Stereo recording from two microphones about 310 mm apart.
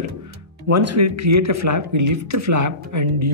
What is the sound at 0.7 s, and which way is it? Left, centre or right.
Speech, right.